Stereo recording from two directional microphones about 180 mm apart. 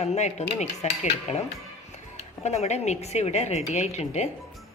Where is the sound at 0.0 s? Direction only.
40° left (ahead or behind).